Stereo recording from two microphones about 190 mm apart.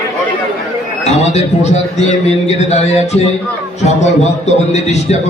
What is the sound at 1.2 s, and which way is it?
A man's voice, 35° left (ahead or behind).